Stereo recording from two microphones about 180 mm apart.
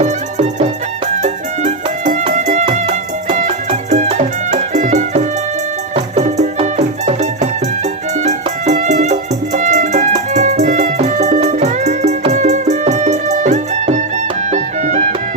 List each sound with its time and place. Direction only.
0.0 s music: 40° right (ahead or behind)